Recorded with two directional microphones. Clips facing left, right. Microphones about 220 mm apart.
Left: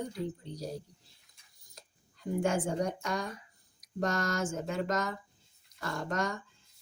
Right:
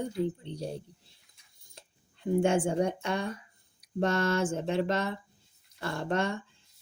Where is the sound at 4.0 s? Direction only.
30° right (ahead or behind).